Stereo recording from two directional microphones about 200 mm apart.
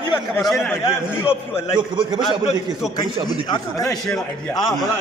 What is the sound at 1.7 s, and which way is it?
Speech, 25° right (ahead or behind).